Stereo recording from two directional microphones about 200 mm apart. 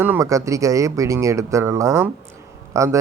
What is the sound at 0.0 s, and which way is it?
Speech, 15° right (ahead or behind).